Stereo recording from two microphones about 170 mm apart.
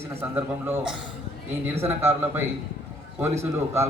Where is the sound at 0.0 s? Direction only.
15° right (ahead or behind).